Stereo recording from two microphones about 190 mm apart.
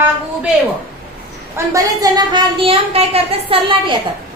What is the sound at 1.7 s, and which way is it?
Speech, 20° right (ahead or behind).